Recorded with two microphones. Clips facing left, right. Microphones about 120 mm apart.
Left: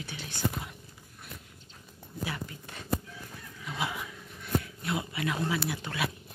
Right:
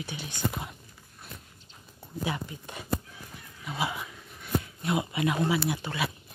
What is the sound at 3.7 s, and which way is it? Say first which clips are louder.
Speech: right 3 dB; 5° right (ahead or behind).